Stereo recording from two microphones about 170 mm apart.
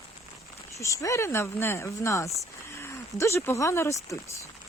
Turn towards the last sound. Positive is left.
turn(degrees=15)  # may be behind; listen again after turning